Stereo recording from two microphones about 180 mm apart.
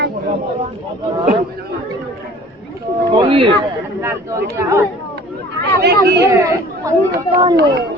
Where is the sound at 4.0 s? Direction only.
15° right (ahead or behind).